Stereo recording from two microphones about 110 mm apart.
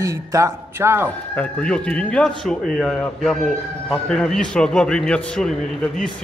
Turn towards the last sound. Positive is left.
turn(degrees=5)  # may be behind; listen again after turning